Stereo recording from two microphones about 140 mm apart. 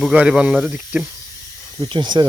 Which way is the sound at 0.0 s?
5° right (ahead or behind).